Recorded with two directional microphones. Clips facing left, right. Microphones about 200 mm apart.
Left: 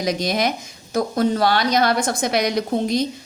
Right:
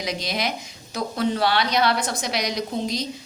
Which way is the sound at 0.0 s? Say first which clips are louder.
Left 6 dB; 45° left (ahead or behind).